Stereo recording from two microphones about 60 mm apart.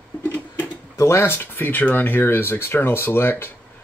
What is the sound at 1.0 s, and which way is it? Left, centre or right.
Speech, left.